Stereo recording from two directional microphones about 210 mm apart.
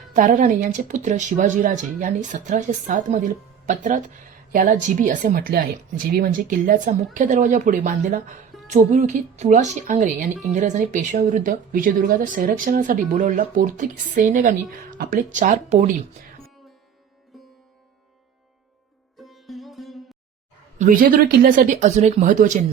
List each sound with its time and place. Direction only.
0.1 s speech: 40° right (ahead or behind)
17.3 s music: centre (ahead or behind)
19.2 s sitar: centre (ahead or behind)
20.7 s speech: 40° right (ahead or behind)